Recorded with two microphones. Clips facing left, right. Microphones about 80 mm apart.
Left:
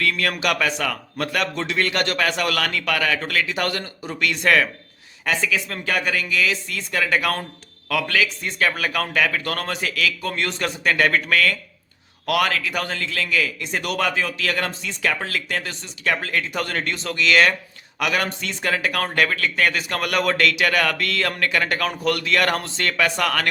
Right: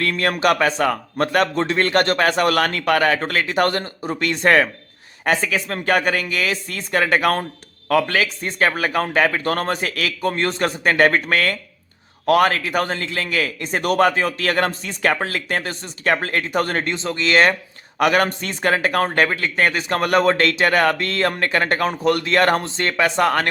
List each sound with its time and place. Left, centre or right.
0.0 s speech: right
16.9 s speech: right